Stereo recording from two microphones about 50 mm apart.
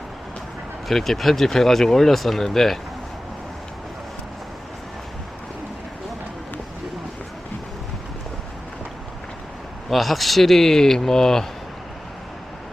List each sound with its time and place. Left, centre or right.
0.9 s speech: centre
9.9 s speech: centre